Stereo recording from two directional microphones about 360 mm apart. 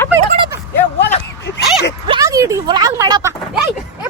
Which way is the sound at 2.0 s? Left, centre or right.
Centre.